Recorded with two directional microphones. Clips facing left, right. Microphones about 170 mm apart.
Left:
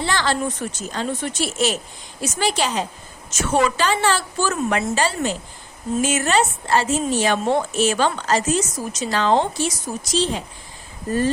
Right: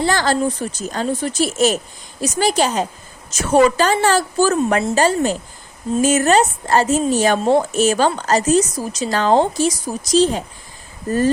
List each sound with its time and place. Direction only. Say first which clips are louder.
0.0 s a woman's voice: right 5 dB; 40° right (ahead or behind)